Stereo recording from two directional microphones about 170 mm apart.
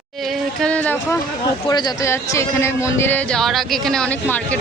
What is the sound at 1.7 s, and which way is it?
Speech, 25° left (ahead or behind).